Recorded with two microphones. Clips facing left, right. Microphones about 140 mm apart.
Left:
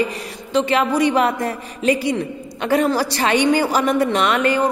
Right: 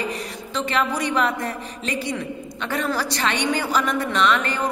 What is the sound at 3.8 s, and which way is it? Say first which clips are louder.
Speech: left 4 dB; 50° left (ahead or behind).